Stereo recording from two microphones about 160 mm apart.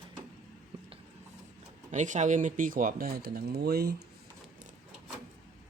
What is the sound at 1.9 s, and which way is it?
Speech, 50° right (ahead or behind).